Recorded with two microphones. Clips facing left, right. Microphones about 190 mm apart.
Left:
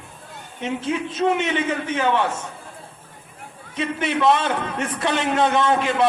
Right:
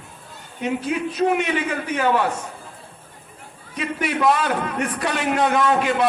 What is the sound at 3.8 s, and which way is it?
A man's voice, 25° left (ahead or behind).